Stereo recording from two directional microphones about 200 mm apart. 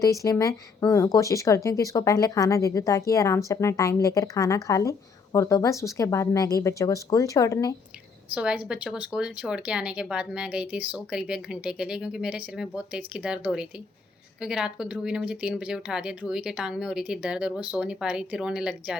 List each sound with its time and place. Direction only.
0.0 s speech: 15° left (ahead or behind)
8.4 s speech: 5° right (ahead or behind)